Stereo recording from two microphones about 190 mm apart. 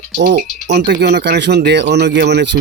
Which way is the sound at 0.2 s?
65° right (ahead or behind).